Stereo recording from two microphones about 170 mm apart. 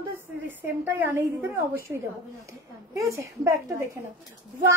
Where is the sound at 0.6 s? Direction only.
10° right (ahead or behind).